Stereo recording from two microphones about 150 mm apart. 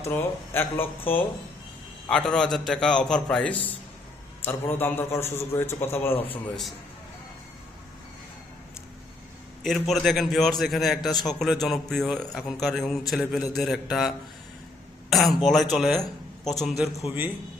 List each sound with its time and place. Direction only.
0.0 s a man's voice: 15° left (ahead or behind)
9.6 s a man's voice: centre (ahead or behind)
11.1 s speech: 30° left (ahead or behind)
11.6 s a man's voice: centre (ahead or behind)
15.1 s a man's voice: centre (ahead or behind)